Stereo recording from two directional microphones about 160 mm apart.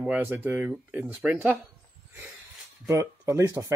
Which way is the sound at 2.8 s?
15° right (ahead or behind).